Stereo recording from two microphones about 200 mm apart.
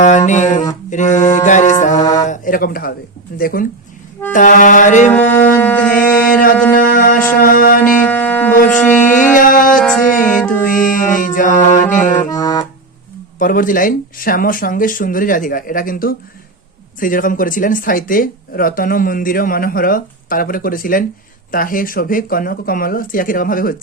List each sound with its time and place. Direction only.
0.0 s a sound: 40° left (ahead or behind)
0.9 s mantra: 40° left (ahead or behind)
2.2 s speech: 40° left (ahead or behind)
4.3 s mantra: 40° left (ahead or behind)
5.5 s music: 5° left (ahead or behind)
6.7 s music: 45° left (ahead or behind)
7.3 s speech: 45° left (ahead or behind)
8.0 s a sound: 10° left (ahead or behind)
9.0 s music: 40° left (ahead or behind)
12.1 s music: 20° left (ahead or behind)
13.4 s speech: 45° left (ahead or behind)